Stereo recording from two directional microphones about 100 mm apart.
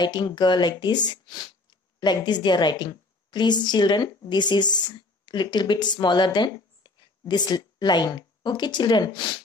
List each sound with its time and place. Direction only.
0.0 s a woman's voice: 45° left (ahead or behind)